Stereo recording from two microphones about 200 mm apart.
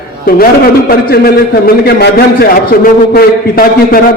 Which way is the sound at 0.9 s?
50° left (ahead or behind).